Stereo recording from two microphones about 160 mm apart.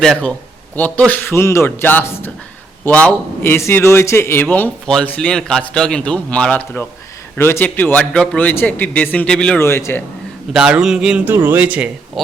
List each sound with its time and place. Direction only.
0.0 s a man's voice: 5° left (ahead or behind)
9.6 s speech: 15° left (ahead or behind)
10.5 s a man's voice: 5° right (ahead or behind)